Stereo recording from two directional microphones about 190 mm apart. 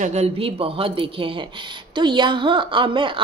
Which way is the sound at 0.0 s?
35° right (ahead or behind).